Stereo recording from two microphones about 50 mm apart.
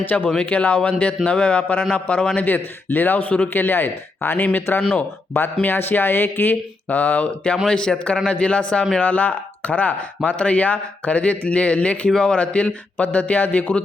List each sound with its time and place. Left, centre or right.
0.0 s speech: left
3.5 s speech: left
4.8 s speech: left
5.6 s speech: left
7.7 s speech: centre